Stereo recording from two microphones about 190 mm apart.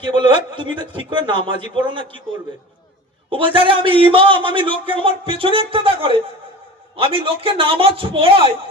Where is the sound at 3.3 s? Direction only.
25° right (ahead or behind).